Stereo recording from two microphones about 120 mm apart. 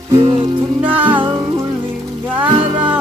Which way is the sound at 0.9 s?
15° right (ahead or behind).